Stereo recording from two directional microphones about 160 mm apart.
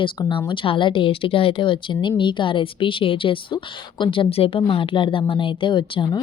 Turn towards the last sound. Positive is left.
turn(degrees=30)  # may be behind; listen again after turning